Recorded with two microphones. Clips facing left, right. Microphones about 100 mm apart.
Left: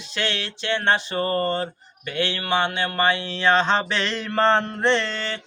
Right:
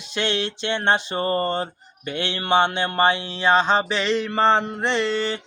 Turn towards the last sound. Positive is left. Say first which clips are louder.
# right 1 dB
turn(degrees=-15)  # may be behind; listen again after turning